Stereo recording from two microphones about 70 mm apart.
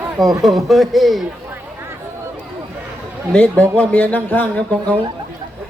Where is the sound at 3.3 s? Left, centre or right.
Centre.